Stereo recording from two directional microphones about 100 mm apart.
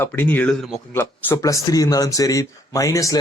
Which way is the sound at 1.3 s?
35° left (ahead or behind).